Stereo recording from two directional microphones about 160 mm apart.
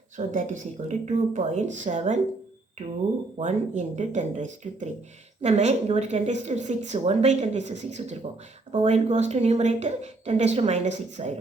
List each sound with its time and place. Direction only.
0.2 s speech: 50° right (ahead or behind)
3.3 s speech: 50° right (ahead or behind)